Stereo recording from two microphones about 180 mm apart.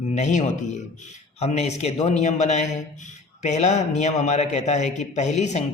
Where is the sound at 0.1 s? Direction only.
40° left (ahead or behind).